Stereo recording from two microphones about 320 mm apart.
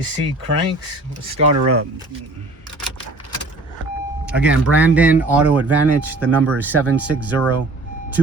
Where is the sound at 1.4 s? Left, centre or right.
Centre.